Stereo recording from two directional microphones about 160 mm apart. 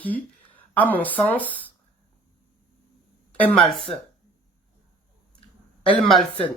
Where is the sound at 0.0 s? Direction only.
10° left (ahead or behind).